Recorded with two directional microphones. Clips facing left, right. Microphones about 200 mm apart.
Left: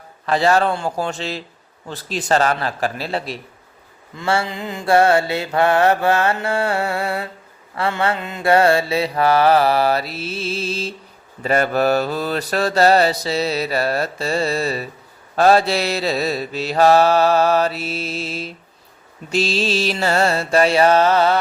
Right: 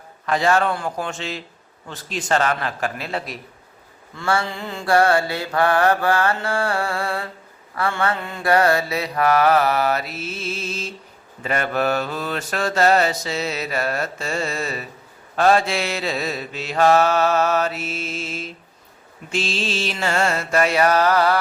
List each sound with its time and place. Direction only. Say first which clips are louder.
0.3 s mantra: left 2 dB; 35° left (ahead or behind)